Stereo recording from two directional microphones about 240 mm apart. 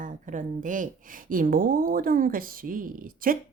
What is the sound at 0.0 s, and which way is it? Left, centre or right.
Speech, right.